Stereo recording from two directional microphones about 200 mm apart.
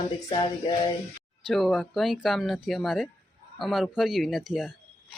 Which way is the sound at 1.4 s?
Centre (ahead or behind).